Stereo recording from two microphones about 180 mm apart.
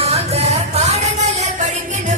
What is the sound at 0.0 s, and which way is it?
Music, 35° right (ahead or behind).